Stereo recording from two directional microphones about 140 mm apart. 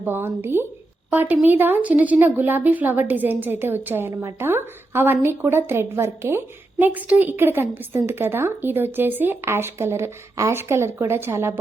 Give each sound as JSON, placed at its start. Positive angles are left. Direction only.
{"t": 0.0, "sound": "a woman's voice", "side_deg": -15}